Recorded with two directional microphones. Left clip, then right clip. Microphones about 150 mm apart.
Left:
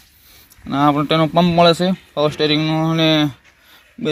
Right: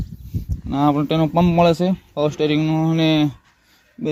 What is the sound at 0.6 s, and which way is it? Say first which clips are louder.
A man's voice: left 3 dB; 10° right (ahead or behind).